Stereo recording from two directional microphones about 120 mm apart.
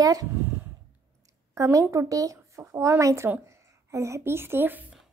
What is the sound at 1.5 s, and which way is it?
Speech, 25° right (ahead or behind).